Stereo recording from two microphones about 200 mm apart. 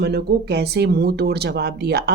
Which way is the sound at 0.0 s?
55° right (ahead or behind).